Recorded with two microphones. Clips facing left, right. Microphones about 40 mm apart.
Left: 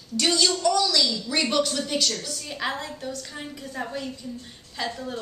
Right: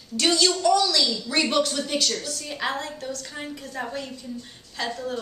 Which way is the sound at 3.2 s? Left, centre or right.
Centre.